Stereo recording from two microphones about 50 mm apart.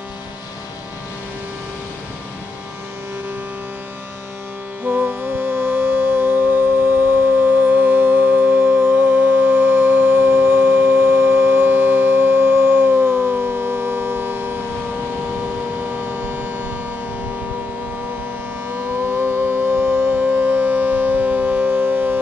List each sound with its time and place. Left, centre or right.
4.8 s music: right
8.9 s civil defense siren: right
16.2 s civil defense siren: right
18.7 s civil defense siren: right